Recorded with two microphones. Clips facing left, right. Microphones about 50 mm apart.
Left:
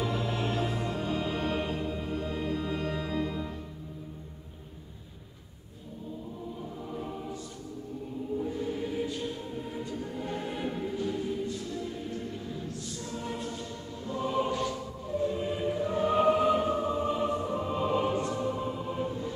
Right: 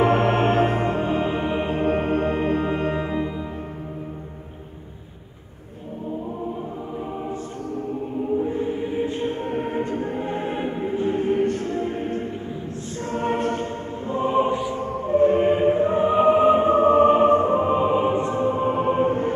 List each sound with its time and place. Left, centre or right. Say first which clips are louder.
0.0 s music: right 13 dB; right
1.8 s music: right 12 dB; right
8.4 s music: right 8 dB; right
13.0 s choir: right 14 dB; right
14.0 s choir: right 9 dB; right
14.8 s music: right 13 dB; right